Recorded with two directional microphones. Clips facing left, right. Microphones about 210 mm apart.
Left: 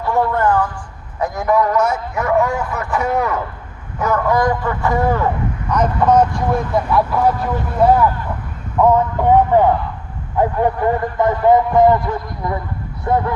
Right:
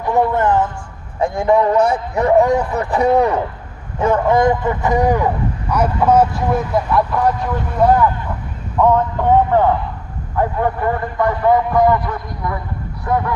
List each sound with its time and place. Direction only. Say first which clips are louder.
0.0 s a sound: right 1 dB; 20° right (ahead or behind)
1.2 s a man's voice: right 2 dB; 30° right (ahead or behind); by 7.3 s centre (ahead or behind)
8.8 s speech: left 1 dB; 10° left (ahead or behind)